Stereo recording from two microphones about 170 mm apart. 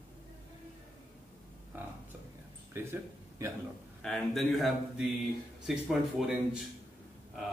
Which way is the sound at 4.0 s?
Centre (ahead or behind).